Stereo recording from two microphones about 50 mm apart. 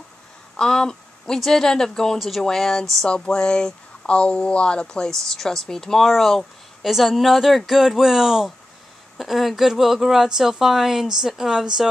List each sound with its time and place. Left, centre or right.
0.6 s speech: centre
6.0 s a woman's voice: centre